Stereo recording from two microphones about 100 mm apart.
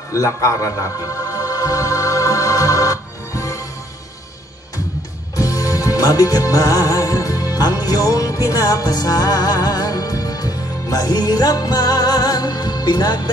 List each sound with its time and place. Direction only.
0.1 s a man's voice: 30° left (ahead or behind)
1.3 s music: 35° left (ahead or behind)
5.3 s music: 35° left (ahead or behind)